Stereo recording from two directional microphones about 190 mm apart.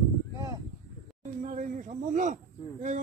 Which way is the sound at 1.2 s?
40° right (ahead or behind).